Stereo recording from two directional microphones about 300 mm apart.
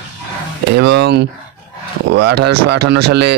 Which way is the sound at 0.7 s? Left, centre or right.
Right.